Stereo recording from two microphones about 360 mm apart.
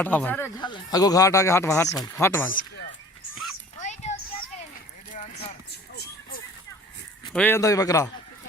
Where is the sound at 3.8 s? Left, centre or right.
Centre.